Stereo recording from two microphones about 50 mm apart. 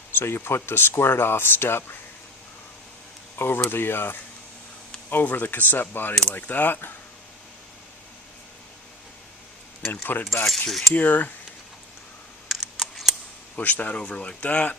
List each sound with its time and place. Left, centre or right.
0.1 s speech: left
3.3 s speech: left
9.9 s speech: left
10.7 s a sound: centre
10.9 s speech: left
12.5 s camera: centre
13.6 s speech: left